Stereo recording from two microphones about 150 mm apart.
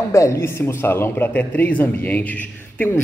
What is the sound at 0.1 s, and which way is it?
Speech, 20° left (ahead or behind).